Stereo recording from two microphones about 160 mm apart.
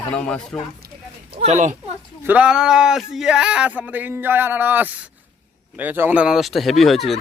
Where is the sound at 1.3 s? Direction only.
40° right (ahead or behind).